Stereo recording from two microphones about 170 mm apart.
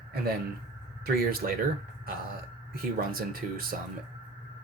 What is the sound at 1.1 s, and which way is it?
Speech, 60° right (ahead or behind).